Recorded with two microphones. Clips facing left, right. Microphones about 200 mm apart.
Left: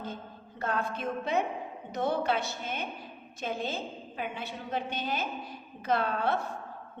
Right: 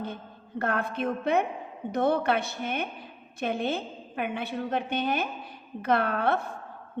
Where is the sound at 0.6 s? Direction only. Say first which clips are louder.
Right 3 dB; 60° right (ahead or behind).